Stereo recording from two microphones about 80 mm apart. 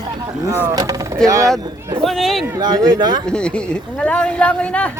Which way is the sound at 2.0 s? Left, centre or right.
Centre.